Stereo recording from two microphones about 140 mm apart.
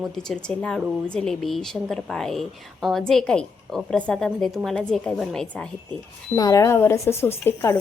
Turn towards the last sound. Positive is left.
turn(degrees=20)  # may be behind; listen again after turning